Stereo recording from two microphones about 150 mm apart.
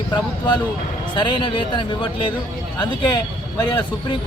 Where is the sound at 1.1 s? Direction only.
30° left (ahead or behind).